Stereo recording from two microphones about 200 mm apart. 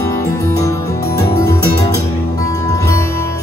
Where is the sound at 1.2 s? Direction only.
15° left (ahead or behind).